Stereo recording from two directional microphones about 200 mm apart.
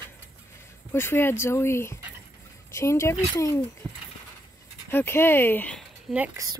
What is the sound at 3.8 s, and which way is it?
Speech, 20° right (ahead or behind).